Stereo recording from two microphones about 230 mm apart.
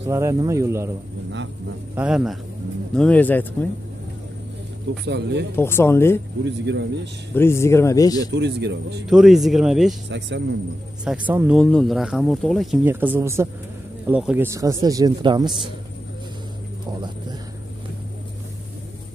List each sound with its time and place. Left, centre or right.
0.0 s a man's voice: centre
2.0 s speech: centre
5.0 s a man's voice: right
5.6 s speech: centre
6.4 s a man's voice: right
7.3 s speech: centre
8.2 s a man's voice: right
9.1 s speech: centre
10.0 s a man's voice: right
11.1 s speech: centre
12.8 s a man's voice: centre